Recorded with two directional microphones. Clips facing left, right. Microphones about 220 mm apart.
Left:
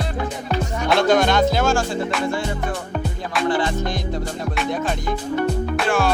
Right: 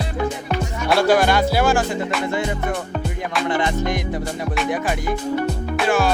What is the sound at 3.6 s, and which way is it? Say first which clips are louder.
Music: right 1 dB; 15° right (ahead or behind).